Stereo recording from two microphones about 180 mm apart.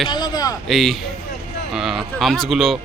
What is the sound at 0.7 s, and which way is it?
Speech, centre (ahead or behind).